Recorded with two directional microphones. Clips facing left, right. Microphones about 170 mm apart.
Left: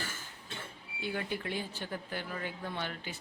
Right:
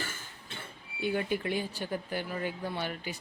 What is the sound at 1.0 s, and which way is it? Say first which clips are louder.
A woman's voice: right 6 dB; 15° right (ahead or behind).